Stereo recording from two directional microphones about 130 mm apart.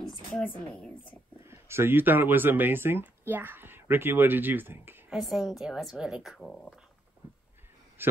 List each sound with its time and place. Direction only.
0.3 s speech: 10° left (ahead or behind)
1.4 s speech: 20° right (ahead or behind)
5.1 s speech: centre (ahead or behind)
8.0 s speech: 15° right (ahead or behind)